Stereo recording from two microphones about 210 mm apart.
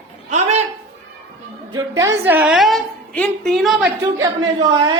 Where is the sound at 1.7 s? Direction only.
15° right (ahead or behind).